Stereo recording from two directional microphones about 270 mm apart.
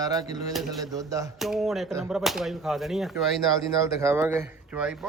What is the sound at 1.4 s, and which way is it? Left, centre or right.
A man's voice, centre.